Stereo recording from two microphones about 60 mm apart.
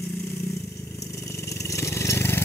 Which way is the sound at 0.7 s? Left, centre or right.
Left.